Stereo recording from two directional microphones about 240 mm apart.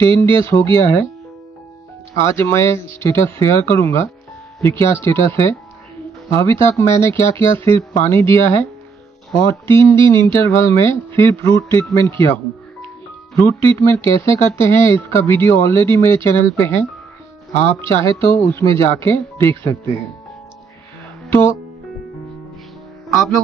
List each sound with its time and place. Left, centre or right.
0.0 s speech: centre
2.1 s speech: centre
13.4 s speech: centre